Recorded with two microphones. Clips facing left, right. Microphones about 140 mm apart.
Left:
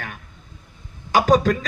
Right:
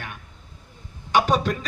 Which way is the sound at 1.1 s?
40° left (ahead or behind).